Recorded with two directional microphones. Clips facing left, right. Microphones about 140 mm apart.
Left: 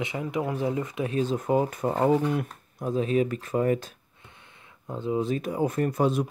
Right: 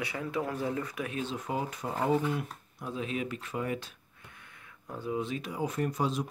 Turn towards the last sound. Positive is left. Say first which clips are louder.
# left 6 dB
turn(degrees=55)  # may be behind; listen again after turning